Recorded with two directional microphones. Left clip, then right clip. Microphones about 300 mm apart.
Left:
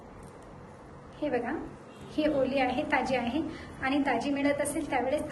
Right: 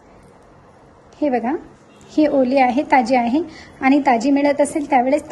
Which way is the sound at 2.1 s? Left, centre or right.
Right.